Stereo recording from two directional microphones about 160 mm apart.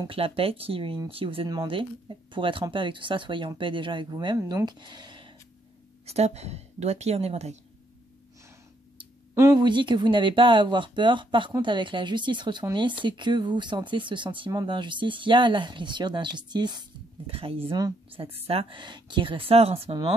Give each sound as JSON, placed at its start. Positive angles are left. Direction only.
{"t": 0.0, "sound": "speech", "side_deg": -35}
{"t": 6.0, "sound": "speech", "side_deg": -40}
{"t": 9.3, "sound": "speech", "side_deg": -15}
{"t": 9.6, "sound": "speech", "side_deg": -30}
{"t": 17.7, "sound": "speech", "side_deg": -25}
{"t": 18.5, "sound": "speech", "side_deg": -35}